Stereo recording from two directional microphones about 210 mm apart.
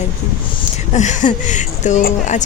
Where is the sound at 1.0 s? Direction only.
35° left (ahead or behind).